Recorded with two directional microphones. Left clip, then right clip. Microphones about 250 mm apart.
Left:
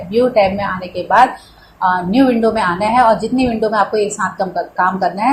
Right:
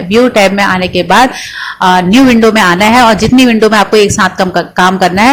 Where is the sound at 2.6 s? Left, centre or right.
Right.